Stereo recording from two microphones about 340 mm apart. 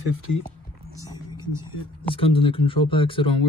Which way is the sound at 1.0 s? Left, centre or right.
Centre.